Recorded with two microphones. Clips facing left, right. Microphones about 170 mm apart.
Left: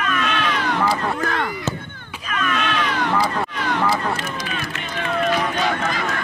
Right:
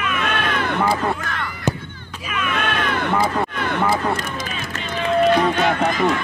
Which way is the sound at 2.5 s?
55° right (ahead or behind).